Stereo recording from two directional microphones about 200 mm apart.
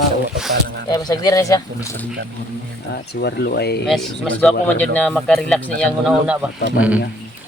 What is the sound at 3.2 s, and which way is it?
Speech, 55° left (ahead or behind).